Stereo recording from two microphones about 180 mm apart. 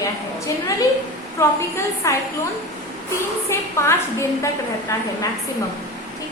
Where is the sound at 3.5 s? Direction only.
15° left (ahead or behind).